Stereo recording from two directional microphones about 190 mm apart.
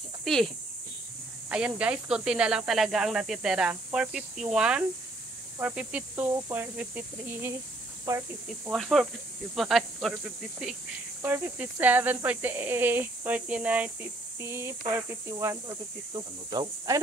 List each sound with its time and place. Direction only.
0.2 s cricket: centre (ahead or behind)
1.5 s speech: 5° right (ahead or behind)
8.6 s speech: centre (ahead or behind)
11.2 s speech: 10° right (ahead or behind)